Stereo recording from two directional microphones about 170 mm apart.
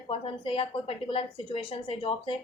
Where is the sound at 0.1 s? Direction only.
30° left (ahead or behind).